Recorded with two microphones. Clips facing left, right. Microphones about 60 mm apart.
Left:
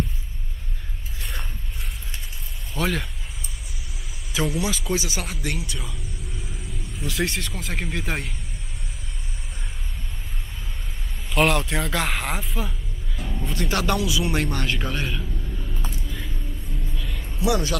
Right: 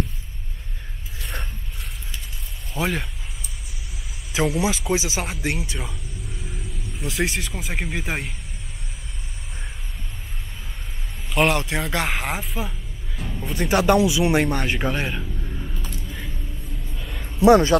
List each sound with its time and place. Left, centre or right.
1.2 s a sound: centre
2.7 s a man's voice: centre
4.7 s speech: centre
7.0 s speech: centre
11.3 s a man's voice: centre
13.8 s a man's voice: right
16.9 s a sound: right
17.4 s speech: right